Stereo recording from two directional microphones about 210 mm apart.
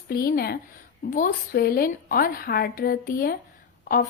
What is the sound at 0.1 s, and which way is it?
A woman's voice, 45° left (ahead or behind).